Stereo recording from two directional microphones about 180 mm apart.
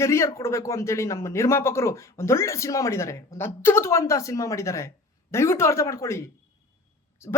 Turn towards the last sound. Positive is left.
turn(degrees=15)  # may be behind; listen again after turning